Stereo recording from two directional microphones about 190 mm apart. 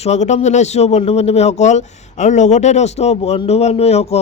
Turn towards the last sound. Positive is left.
turn(degrees=35)  # may be behind; listen again after turning